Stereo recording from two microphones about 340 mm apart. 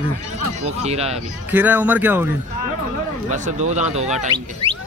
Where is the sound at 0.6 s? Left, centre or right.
Centre.